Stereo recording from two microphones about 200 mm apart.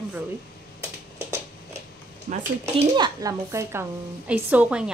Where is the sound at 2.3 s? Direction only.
40° right (ahead or behind).